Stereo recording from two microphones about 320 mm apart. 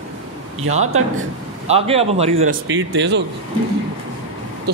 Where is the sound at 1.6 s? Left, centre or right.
Centre.